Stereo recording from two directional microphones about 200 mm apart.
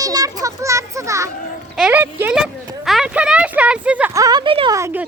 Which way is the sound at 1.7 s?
5° right (ahead or behind).